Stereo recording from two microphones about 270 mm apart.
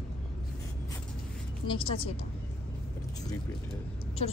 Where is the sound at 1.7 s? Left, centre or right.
Centre.